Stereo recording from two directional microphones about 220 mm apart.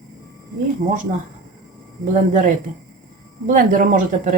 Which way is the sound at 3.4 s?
35° right (ahead or behind).